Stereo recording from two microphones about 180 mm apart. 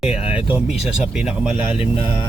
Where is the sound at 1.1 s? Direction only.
5° right (ahead or behind).